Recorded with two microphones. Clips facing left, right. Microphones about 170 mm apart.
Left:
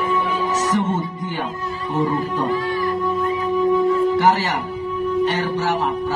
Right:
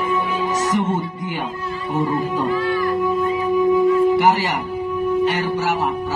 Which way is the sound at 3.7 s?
15° right (ahead or behind).